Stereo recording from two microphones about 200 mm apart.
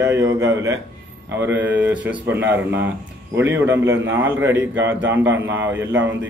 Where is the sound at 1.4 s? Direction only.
10° right (ahead or behind).